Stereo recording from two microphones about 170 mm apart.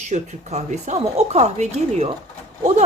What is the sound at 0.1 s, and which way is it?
Speech, 40° right (ahead or behind).